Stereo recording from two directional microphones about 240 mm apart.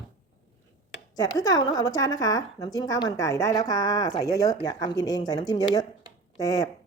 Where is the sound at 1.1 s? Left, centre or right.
Centre.